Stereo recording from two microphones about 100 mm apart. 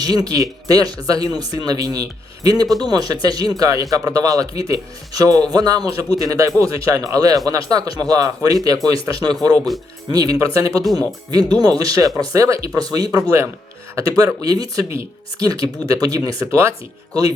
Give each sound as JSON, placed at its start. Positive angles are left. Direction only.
{"t": 0.0, "sound": "speech", "side_deg": -40}
{"t": 14.8, "sound": "speech", "side_deg": -25}
{"t": 15.4, "sound": "speech", "side_deg": -40}